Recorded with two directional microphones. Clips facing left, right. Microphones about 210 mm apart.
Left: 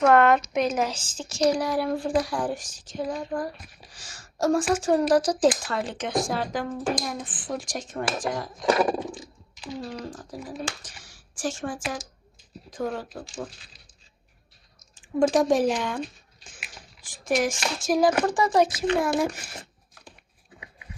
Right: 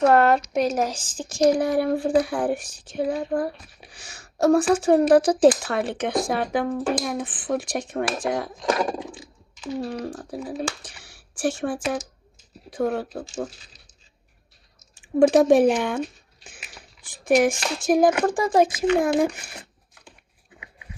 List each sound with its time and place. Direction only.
0.0 s a sound: 40° right (ahead or behind)
0.5 s speech: 40° right (ahead or behind)
1.0 s speech: 15° right (ahead or behind)
1.3 s speech: 50° right (ahead or behind)
9.7 s speech: 60° right (ahead or behind)
14.9 s speech: 65° right (ahead or behind)